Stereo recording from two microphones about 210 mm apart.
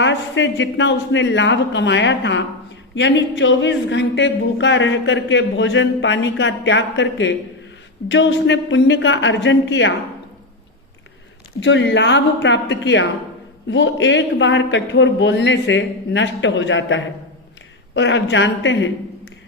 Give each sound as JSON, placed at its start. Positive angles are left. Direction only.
{"t": 0.0, "sound": "a woman's voice", "side_deg": 60}
{"t": 11.6, "sound": "a woman's voice", "side_deg": 60}